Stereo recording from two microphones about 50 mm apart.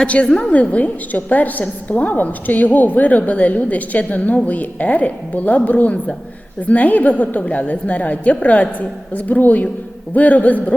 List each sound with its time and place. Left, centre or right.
0.0 s a woman's voice: left